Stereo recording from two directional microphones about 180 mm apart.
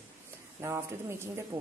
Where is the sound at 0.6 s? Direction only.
15° right (ahead or behind).